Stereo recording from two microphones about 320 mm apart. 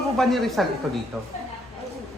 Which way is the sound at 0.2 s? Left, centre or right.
Centre.